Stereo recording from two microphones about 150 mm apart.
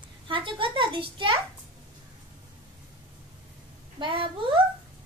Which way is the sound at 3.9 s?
35° right (ahead or behind).